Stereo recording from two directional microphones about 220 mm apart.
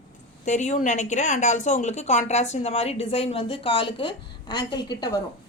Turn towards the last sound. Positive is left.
turn(degrees=20)  # may be behind; listen again after turning